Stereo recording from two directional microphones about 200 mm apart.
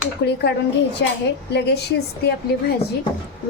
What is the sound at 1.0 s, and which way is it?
A woman's voice, 60° left (ahead or behind).